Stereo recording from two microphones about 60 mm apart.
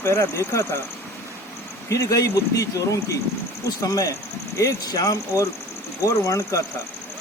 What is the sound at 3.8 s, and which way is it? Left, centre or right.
Speech, left.